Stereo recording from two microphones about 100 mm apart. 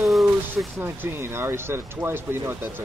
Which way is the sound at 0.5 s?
25° right (ahead or behind).